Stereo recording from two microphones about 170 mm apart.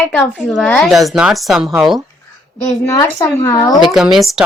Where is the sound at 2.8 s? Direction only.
20° left (ahead or behind).